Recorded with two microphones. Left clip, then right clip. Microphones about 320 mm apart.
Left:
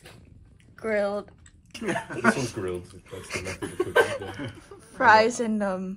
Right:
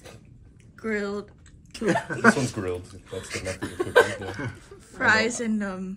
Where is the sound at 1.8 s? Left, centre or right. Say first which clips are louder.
Right 4 dB; centre.